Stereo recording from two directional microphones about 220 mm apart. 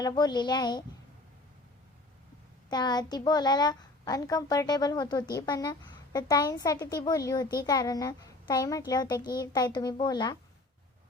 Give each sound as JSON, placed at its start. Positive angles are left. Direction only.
{"t": 0.0, "sound": "a child's voice", "side_deg": 20}
{"t": 2.6, "sound": "a child's voice", "side_deg": 20}